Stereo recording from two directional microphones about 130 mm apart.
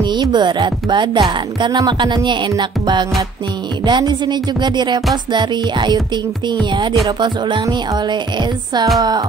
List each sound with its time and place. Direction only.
0.0 s speech: 35° right (ahead or behind)